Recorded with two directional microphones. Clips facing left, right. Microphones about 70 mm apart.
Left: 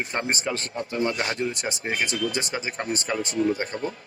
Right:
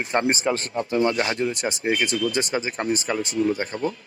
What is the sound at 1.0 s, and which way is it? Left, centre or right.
Speech, right.